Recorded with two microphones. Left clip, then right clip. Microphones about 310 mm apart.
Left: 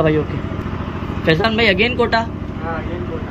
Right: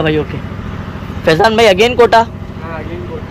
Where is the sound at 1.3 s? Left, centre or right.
Centre.